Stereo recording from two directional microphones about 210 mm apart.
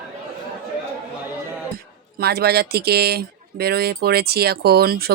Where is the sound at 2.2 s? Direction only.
50° right (ahead or behind).